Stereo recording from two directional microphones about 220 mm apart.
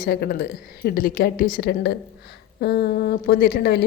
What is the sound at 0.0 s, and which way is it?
Speech, 45° left (ahead or behind).